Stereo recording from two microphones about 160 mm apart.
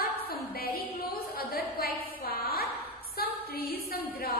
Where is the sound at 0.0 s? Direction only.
70° left (ahead or behind).